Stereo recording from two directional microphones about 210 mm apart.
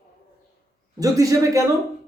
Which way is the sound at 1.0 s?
15° right (ahead or behind).